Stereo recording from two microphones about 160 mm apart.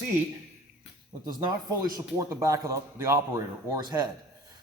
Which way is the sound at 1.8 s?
20° right (ahead or behind).